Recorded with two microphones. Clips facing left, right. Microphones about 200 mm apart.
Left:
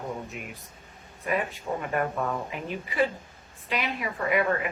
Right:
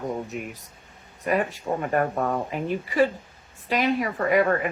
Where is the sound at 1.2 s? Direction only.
45° right (ahead or behind).